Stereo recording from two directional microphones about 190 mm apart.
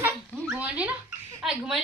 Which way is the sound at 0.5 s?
5° right (ahead or behind).